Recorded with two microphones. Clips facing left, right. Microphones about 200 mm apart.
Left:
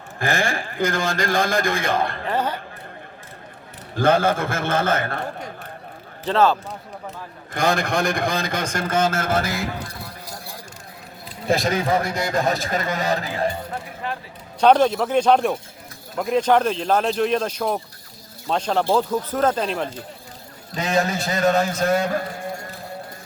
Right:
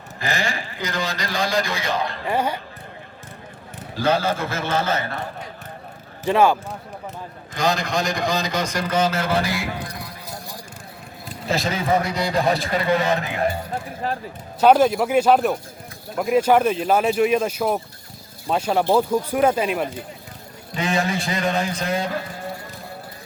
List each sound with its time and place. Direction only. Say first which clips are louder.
0.2 s a man's voice: left 3 dB; 50° left (ahead or behind)
2.2 s speech: right 1 dB; 10° right (ahead or behind)
3.9 s a man's voice: left 3 dB; 55° left (ahead or behind)
6.2 s speech: right 1 dB; 10° right (ahead or behind)
7.5 s a man's voice: left 1 dB; 55° left (ahead or behind)
12.0 s a man's voice: right 1 dB; 50° left (ahead or behind)
14.0 s speech: right 3 dB; 40° right (ahead or behind)
14.6 s speech: right 1 dB; 5° right (ahead or behind)
20.7 s a man's voice: left 1 dB; 40° left (ahead or behind)